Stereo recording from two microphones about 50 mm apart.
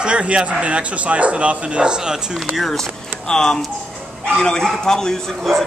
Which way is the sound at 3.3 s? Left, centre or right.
Centre.